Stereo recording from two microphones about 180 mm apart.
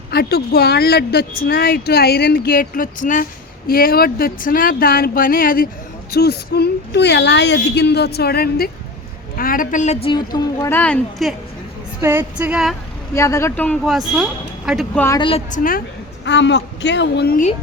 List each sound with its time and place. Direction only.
0.1 s speech: 60° left (ahead or behind); by 10.1 s 40° left (ahead or behind)
10.1 s a woman's voice: 25° left (ahead or behind); by 11.3 s 5° left (ahead or behind)
12.0 s female singing: 10° right (ahead or behind)
13.1 s a woman's voice: 15° left (ahead or behind)
14.2 s speech: 5° right (ahead or behind)
14.9 s a woman's voice: 15° left (ahead or behind)
15.4 s speech: 50° left (ahead or behind)
16.2 s a woman's voice: 75° left (ahead or behind); by 17.5 s 55° left (ahead or behind)